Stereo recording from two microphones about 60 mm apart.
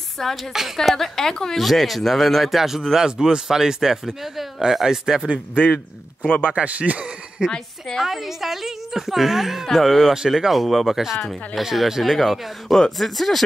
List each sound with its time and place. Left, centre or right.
0.2 s a woman's voice: centre
0.5 s a woman's voice: centre
6.2 s speech: centre
6.5 s speech: right
8.0 s a woman's voice: centre
10.1 s a woman's voice: centre